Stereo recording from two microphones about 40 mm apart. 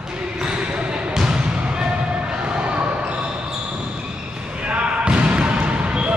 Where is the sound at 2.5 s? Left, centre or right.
Right.